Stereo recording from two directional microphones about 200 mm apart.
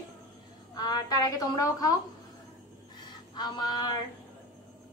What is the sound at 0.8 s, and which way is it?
A woman's voice, 20° left (ahead or behind).